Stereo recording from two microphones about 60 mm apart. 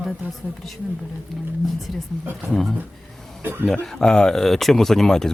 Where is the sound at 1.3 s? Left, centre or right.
Centre.